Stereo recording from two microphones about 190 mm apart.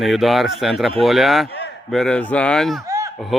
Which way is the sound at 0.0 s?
Centre (ahead or behind).